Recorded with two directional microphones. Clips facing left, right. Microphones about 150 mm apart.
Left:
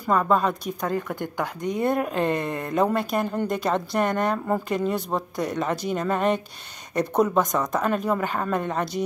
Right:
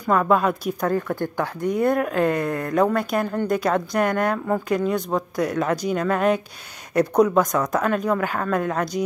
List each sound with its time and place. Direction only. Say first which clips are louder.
0.0 s a woman's voice: right 2 dB; centre (ahead or behind)
0.8 s speech: right 4 dB; 15° left (ahead or behind)
1.8 s a woman's voice: right 3 dB; centre (ahead or behind)